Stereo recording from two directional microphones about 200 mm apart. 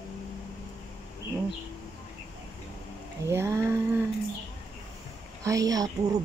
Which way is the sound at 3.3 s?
15° right (ahead or behind).